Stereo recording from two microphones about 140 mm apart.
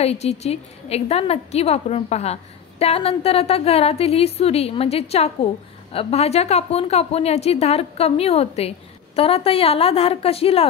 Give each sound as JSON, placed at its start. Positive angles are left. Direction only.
{"t": 0.0, "sound": "a woman's voice", "side_deg": 50}